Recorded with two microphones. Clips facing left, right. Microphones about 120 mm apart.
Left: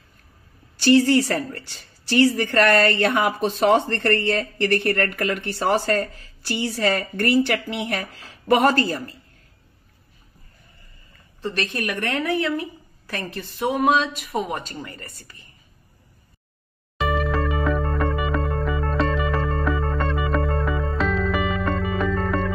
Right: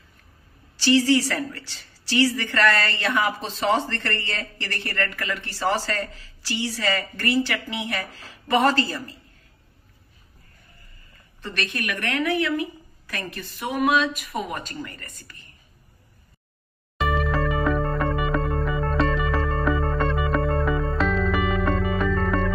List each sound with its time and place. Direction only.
0.7 s a woman's voice: 50° left (ahead or behind)
11.4 s speech: 30° left (ahead or behind)
17.0 s music: centre (ahead or behind)